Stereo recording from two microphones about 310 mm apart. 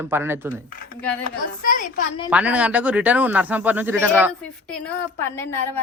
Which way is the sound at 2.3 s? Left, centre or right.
Centre.